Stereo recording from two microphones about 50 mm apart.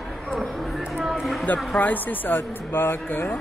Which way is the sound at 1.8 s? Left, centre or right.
Left.